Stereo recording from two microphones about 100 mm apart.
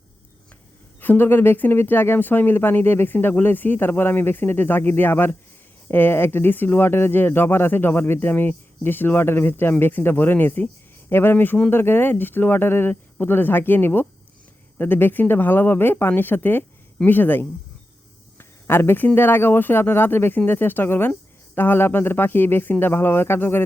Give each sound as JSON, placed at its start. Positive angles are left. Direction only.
{"t": 1.0, "sound": "speech", "side_deg": 20}